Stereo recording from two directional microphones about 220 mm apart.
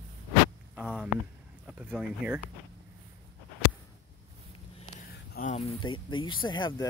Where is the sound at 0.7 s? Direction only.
5° right (ahead or behind).